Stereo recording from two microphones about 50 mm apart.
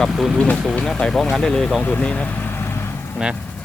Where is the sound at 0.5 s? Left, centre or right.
Centre.